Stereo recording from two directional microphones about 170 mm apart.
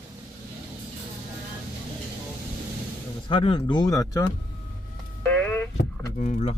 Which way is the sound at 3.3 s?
30° left (ahead or behind).